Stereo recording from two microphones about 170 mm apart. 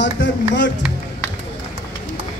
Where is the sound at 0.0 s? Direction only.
90° left.